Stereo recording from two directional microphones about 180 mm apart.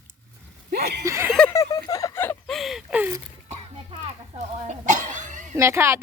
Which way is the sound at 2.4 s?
Centre (ahead or behind).